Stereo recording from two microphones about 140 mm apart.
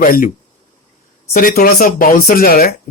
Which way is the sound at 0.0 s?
90° left.